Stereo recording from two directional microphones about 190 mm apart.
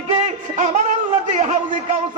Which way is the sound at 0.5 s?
40° right (ahead or behind).